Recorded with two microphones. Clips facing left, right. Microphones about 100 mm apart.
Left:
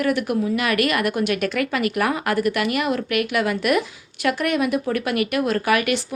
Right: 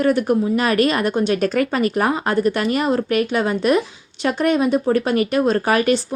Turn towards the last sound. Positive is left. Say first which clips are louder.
# right 3 dB
turn(degrees=-35)  # may be behind; listen again after turning